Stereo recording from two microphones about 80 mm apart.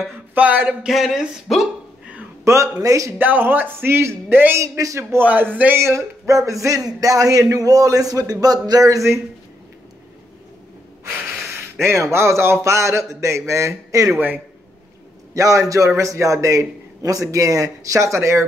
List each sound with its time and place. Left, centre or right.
0.3 s speech: right
0.8 s speech: centre
2.4 s a man's voice: right
3.2 s speech: right
4.7 s a man's voice: right
5.2 s speech: right
5.8 s speech: right
11.8 s a man's voice: right
15.3 s a man's voice: right